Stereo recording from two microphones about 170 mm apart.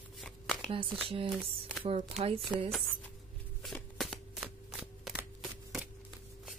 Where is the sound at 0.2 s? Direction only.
Centre (ahead or behind).